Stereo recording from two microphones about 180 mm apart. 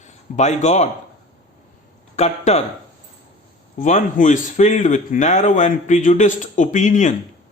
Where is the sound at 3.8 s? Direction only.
45° left (ahead or behind).